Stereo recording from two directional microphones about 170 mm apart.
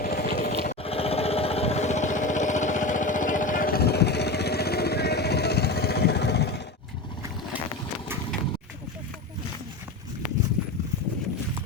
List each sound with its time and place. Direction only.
0.0 s vehicle: 65° left (ahead or behind)
0.7 s jackhammer: 35° left (ahead or behind); by 6.6 s 75° left (ahead or behind)